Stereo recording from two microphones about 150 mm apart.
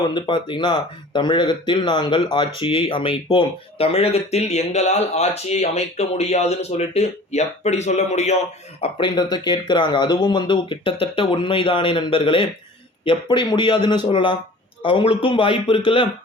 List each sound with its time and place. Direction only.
0.0 s speech: 30° left (ahead or behind); by 8.4 s 50° left (ahead or behind)
8.8 s speech: 35° left (ahead or behind)